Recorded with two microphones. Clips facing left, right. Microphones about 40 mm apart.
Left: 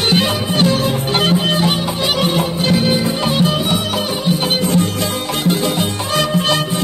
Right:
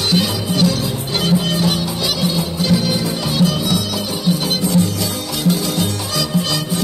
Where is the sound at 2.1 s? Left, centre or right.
Left.